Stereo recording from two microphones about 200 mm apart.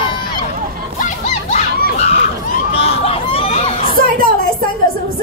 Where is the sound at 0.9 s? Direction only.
40° left (ahead or behind).